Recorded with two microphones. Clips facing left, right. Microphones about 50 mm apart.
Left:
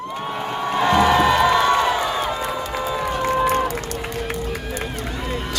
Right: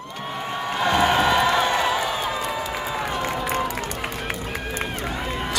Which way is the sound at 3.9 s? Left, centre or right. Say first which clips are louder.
Left 2 dB; right.